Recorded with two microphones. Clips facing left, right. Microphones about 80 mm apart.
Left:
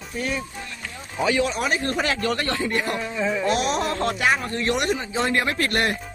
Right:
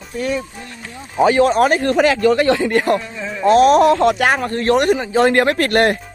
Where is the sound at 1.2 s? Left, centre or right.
Right.